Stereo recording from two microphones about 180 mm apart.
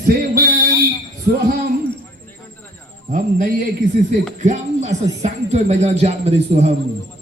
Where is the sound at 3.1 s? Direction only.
45° right (ahead or behind).